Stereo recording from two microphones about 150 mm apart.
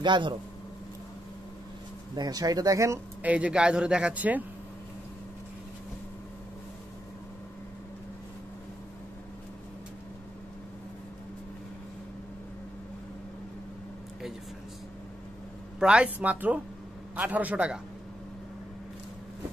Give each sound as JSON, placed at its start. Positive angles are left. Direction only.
{"t": 0.0, "sound": "speech", "side_deg": -30}
{"t": 2.1, "sound": "speech", "side_deg": -25}
{"t": 3.2, "sound": "speech", "side_deg": -10}
{"t": 15.8, "sound": "speech", "side_deg": -5}